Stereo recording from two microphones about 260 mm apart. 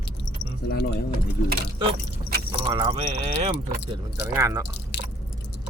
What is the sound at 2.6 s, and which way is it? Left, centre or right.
Speech, centre.